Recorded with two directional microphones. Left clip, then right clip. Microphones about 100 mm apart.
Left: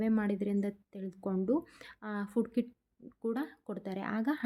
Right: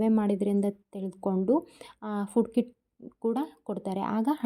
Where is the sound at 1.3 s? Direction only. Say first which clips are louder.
Right 6 dB; 25° right (ahead or behind); by 4.4 s 40° right (ahead or behind).